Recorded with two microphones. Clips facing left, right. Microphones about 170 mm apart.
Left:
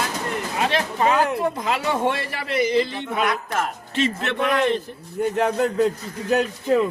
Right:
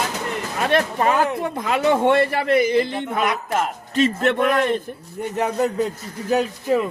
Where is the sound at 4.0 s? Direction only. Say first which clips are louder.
Right 5 dB; 45° right (ahead or behind).